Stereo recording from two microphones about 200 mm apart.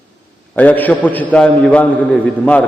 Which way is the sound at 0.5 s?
10° left (ahead or behind).